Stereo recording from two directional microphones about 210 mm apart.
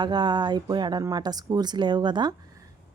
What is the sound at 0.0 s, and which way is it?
A woman's voice, 20° right (ahead or behind).